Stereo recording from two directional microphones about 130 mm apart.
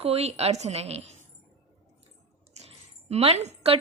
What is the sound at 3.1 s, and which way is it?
Speech, 55° right (ahead or behind).